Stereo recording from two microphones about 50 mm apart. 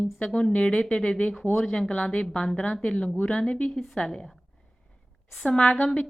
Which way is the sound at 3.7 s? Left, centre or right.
Centre.